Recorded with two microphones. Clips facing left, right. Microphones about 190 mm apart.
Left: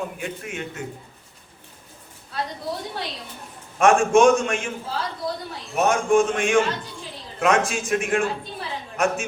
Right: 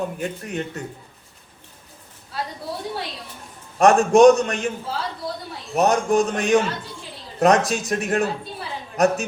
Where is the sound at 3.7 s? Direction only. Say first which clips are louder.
Right 2 dB; 40° right (ahead or behind).